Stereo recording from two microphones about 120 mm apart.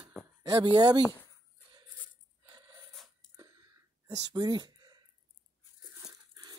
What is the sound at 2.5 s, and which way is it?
Gasp, 30° right (ahead or behind).